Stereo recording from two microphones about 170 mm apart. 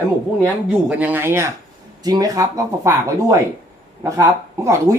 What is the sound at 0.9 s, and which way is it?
Speech, 10° right (ahead or behind).